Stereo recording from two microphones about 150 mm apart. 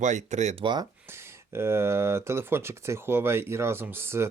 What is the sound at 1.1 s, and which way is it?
Speech, 15° right (ahead or behind).